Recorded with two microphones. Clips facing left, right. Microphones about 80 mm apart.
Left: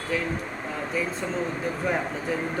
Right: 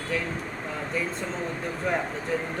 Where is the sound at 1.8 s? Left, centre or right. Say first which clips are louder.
Even; centre.